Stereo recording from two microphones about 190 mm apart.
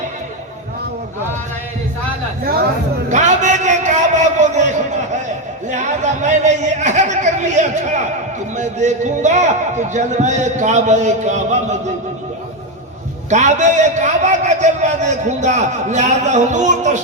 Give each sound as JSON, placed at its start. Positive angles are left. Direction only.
{"t": 3.1, "sound": "a sound", "side_deg": -40}
{"t": 8.5, "sound": "a man's voice", "side_deg": -40}
{"t": 13.3, "sound": "a man's voice", "side_deg": -40}